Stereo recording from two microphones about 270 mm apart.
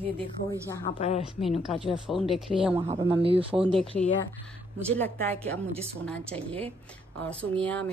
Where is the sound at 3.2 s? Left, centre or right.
Centre.